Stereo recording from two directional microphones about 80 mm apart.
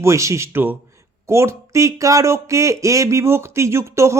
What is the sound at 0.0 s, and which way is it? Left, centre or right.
Speech, right.